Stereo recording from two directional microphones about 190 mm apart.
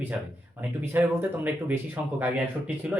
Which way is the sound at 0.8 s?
10° right (ahead or behind).